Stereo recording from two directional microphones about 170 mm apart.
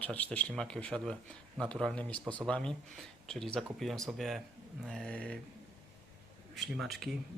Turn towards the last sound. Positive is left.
turn(degrees=0)  # may be behind; listen again after turning